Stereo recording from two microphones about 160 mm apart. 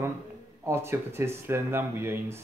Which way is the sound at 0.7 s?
15° right (ahead or behind).